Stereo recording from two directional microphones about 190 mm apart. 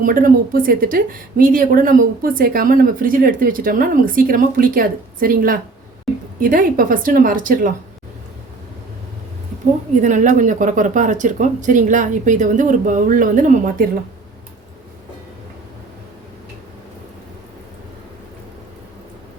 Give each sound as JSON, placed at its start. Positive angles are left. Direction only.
{"t": 0.0, "sound": "a woman's voice", "side_deg": -45}
{"t": 10.0, "sound": "a woman's voice", "side_deg": -40}